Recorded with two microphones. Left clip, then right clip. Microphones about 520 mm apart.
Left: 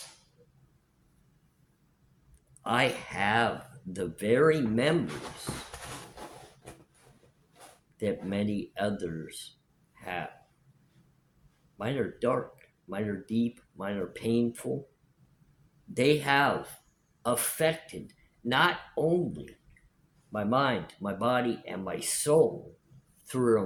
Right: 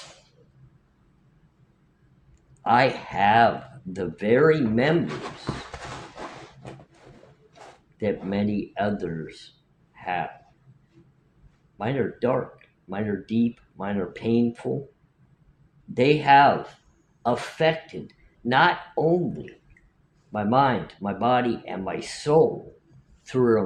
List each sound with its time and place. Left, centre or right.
2.6 s speech: left
6.6 s a sound: left
7.9 s speech: left
9.9 s a sound: left
11.8 s speech: left
16.0 s speech: left
20.3 s speech: left